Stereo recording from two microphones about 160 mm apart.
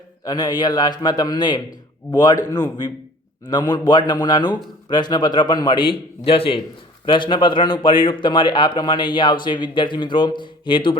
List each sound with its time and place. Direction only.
0.3 s a man's voice: 25° left (ahead or behind)